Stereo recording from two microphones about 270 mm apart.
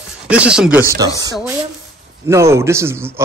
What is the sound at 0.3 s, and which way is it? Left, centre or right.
Speech, centre.